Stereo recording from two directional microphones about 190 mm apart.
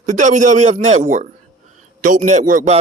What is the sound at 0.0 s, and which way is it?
Speech, 40° right (ahead or behind).